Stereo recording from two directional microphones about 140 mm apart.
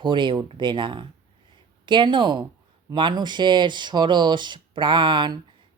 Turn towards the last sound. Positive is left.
turn(degrees=-35)  # may be behind; listen again after turning